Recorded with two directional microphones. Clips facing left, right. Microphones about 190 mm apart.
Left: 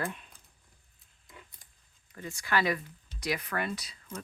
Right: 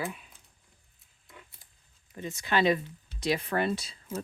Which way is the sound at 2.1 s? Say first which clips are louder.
Right 2 dB; 20° right (ahead or behind).